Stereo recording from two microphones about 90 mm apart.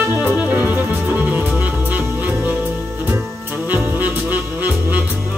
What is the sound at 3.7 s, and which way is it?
Music, 20° right (ahead or behind).